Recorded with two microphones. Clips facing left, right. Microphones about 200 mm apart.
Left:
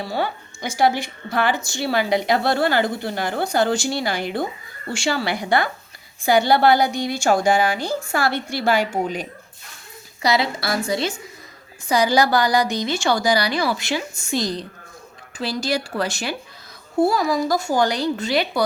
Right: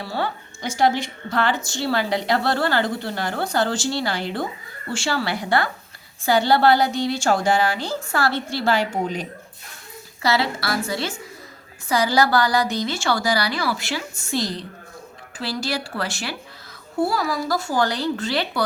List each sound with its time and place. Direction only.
0.0 s a woman's voice: 15° left (ahead or behind)
10.2 s a woman's voice: 15° left (ahead or behind)